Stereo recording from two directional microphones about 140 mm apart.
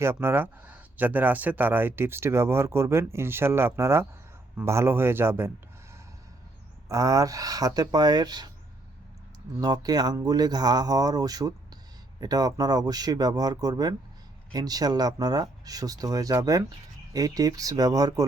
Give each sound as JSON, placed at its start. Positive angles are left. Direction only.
{"t": 0.0, "sound": "speech", "side_deg": -15}
{"t": 6.8, "sound": "speech", "side_deg": -25}
{"t": 9.6, "sound": "speech", "side_deg": -25}